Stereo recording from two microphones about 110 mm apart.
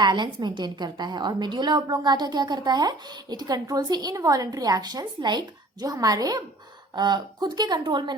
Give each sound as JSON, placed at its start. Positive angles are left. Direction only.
{"t": 0.0, "sound": "a woman's voice", "side_deg": -45}